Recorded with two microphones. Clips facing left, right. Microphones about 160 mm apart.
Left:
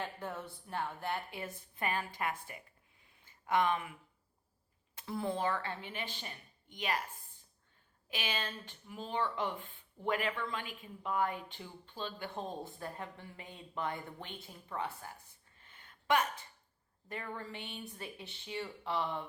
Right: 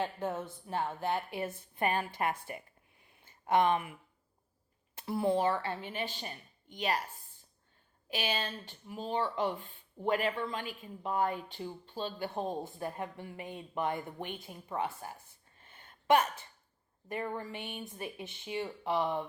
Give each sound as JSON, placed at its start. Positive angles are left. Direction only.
{"t": 0.0, "sound": "speech", "side_deg": -20}
{"t": 2.2, "sound": "speech", "side_deg": -35}
{"t": 3.5, "sound": "speech", "side_deg": -25}
{"t": 5.0, "sound": "a woman's voice", "side_deg": -15}
{"t": 5.9, "sound": "speech", "side_deg": -40}
{"t": 8.1, "sound": "speech", "side_deg": -40}
{"t": 12.3, "sound": "a woman's voice", "side_deg": -20}
{"t": 15.7, "sound": "a sound", "side_deg": -50}
{"t": 17.1, "sound": "speech", "side_deg": -20}